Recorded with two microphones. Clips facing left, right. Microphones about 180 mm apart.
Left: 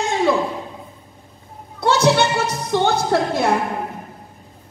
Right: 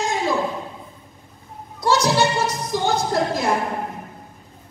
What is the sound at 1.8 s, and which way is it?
Music, 60° left (ahead or behind).